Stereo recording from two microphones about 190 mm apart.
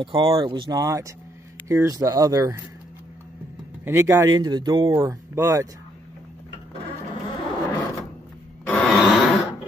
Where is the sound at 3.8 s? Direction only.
15° right (ahead or behind).